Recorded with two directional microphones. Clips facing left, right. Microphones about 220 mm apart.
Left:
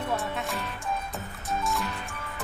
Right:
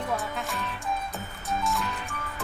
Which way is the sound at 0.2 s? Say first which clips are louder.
Left 1 dB; centre (ahead or behind).